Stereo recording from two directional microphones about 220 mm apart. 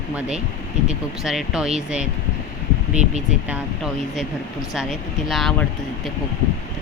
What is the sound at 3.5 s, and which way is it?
Speech, centre (ahead or behind).